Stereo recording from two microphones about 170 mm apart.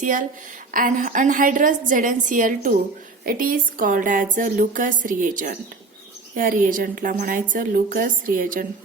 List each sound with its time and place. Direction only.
0.0 s a woman's voice: 50° right (ahead or behind)